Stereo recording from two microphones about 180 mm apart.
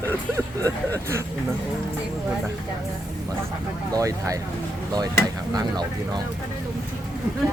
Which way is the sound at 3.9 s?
20° right (ahead or behind).